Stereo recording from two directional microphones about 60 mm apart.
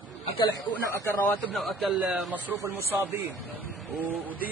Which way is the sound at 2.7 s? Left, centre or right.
Right.